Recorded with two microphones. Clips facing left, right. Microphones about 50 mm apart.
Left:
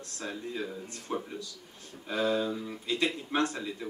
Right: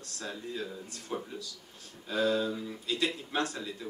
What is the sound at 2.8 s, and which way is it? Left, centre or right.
Speech, left.